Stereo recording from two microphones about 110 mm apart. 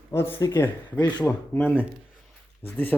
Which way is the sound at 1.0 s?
40° left (ahead or behind).